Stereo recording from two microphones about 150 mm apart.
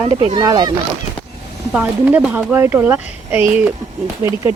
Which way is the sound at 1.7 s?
10° right (ahead or behind).